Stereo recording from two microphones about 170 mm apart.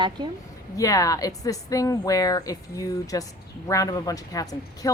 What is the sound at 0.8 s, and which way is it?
Speech, 20° left (ahead or behind).